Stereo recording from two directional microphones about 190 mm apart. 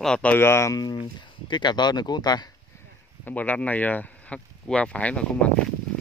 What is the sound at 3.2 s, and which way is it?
Speech, 10° left (ahead or behind).